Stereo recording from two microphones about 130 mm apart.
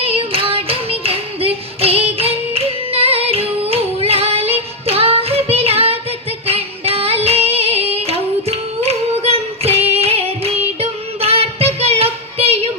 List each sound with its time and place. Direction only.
0.0 s singing: 45° right (ahead or behind)